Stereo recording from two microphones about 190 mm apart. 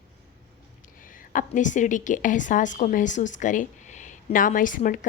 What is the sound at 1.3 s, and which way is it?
A woman's voice, 45° left (ahead or behind).